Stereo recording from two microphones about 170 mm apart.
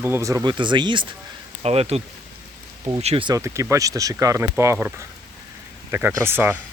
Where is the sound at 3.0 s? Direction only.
35° right (ahead or behind).